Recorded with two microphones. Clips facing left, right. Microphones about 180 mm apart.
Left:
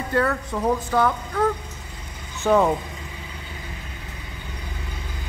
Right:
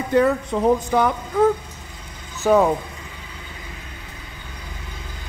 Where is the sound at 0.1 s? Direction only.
20° right (ahead or behind).